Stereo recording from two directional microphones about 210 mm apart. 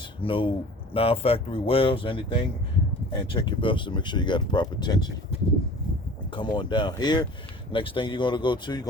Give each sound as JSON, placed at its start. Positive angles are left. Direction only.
{"t": 0.2, "sound": "speech", "side_deg": 25}
{"t": 6.3, "sound": "speech", "side_deg": 20}